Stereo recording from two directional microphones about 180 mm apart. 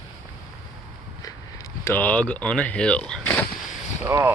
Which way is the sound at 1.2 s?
20° left (ahead or behind).